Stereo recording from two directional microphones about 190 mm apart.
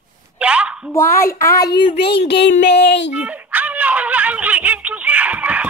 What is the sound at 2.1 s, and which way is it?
Child singing, 60° left (ahead or behind).